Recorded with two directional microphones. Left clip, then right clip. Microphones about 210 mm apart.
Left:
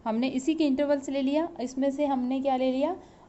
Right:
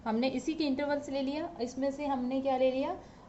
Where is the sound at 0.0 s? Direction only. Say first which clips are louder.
Left 3 dB; 35° left (ahead or behind).